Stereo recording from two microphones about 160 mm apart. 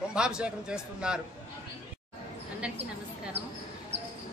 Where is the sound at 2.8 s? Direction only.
40° right (ahead or behind).